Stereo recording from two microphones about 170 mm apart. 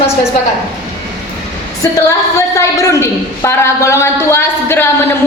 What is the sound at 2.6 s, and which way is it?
A woman's voice, 15° left (ahead or behind).